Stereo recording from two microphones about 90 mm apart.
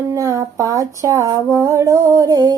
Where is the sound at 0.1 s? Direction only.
35° right (ahead or behind).